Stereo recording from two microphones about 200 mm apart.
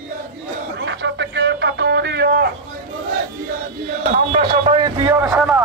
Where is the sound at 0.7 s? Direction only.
65° right (ahead or behind).